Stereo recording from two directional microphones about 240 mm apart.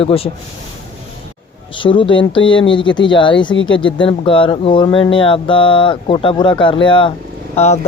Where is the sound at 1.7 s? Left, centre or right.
Left.